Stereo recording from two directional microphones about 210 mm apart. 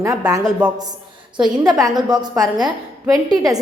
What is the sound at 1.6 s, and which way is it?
Speech, 15° right (ahead or behind).